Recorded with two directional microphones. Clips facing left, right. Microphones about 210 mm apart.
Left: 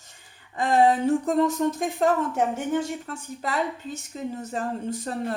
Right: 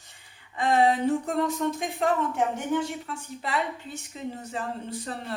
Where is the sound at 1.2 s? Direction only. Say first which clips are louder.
Left 4 dB; 45° left (ahead or behind).